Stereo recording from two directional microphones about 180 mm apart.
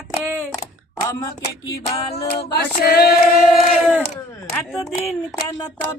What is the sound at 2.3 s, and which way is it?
Female singing, 65° left (ahead or behind).